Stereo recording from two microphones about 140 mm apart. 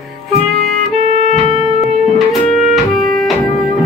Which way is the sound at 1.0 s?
50° right (ahead or behind).